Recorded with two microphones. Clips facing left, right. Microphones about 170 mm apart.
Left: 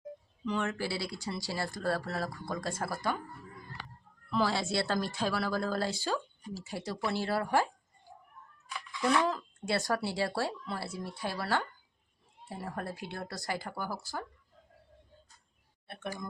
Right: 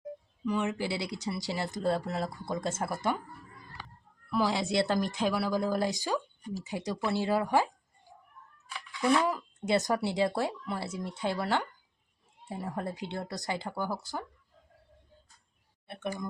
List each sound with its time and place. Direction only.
0.4 s speech: 15° right (ahead or behind)
4.3 s speech: 15° right (ahead or behind)
9.0 s speech: 10° right (ahead or behind)
15.9 s speech: 20° right (ahead or behind)